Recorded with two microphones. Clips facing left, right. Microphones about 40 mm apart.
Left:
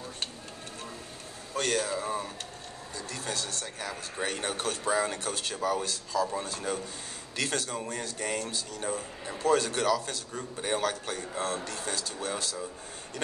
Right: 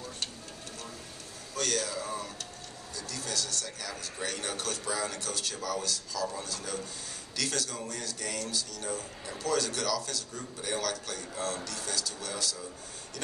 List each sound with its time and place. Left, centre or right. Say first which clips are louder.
1.5 s a man's voice: left 3 dB; left